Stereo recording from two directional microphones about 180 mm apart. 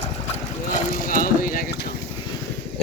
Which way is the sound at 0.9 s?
50° left (ahead or behind).